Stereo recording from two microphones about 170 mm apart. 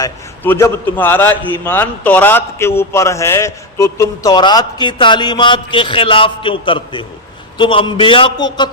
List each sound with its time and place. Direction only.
0.0 s a man's voice: 15° left (ahead or behind)